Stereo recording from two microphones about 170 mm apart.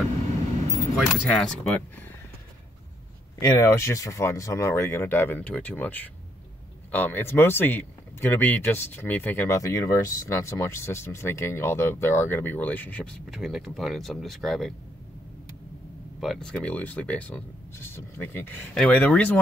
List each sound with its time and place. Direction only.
0.9 s speech: 5° left (ahead or behind)
3.3 s speech: 20° left (ahead or behind); by 14.7 s centre (ahead or behind)
16.2 s speech: centre (ahead or behind)